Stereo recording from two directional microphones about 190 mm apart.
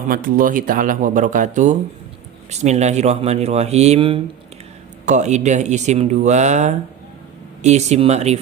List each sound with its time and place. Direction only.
0.1 s speech: 50° right (ahead or behind)